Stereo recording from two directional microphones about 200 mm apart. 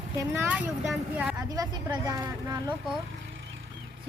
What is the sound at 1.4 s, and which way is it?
Speech, 20° right (ahead or behind).